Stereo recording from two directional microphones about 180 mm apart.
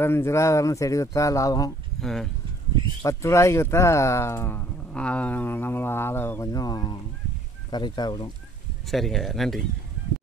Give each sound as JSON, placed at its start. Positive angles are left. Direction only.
{"t": 0.0, "sound": "speech", "side_deg": 15}
{"t": 2.0, "sound": "speech", "side_deg": 0}
{"t": 3.0, "sound": "speech", "side_deg": 15}
{"t": 8.9, "sound": "speech", "side_deg": 0}